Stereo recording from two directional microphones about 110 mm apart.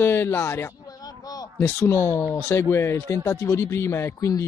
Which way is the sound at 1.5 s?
25° left (ahead or behind).